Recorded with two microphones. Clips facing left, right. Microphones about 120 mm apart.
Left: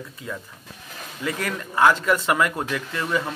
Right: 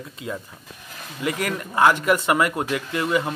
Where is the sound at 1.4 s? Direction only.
15° right (ahead or behind).